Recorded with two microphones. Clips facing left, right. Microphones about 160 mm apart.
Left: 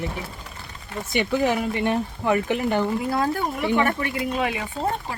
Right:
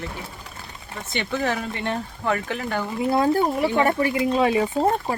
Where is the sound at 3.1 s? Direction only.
25° right (ahead or behind).